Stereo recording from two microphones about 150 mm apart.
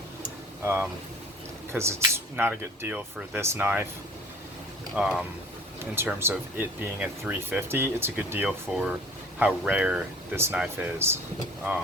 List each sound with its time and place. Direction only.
0.6 s speech: 15° right (ahead or behind)
4.9 s speech: centre (ahead or behind)
5.8 s speech: 15° right (ahead or behind)
8.4 s speech: 5° right (ahead or behind)